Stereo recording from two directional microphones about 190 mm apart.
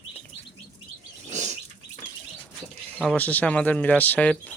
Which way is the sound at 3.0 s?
5° left (ahead or behind).